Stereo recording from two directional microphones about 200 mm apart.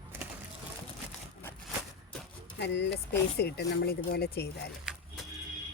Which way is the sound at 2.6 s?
60° left (ahead or behind).